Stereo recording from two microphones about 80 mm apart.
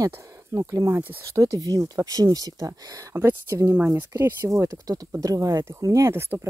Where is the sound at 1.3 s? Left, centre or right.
Right.